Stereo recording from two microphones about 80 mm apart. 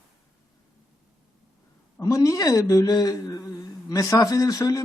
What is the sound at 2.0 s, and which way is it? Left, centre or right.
A woman's voice, left.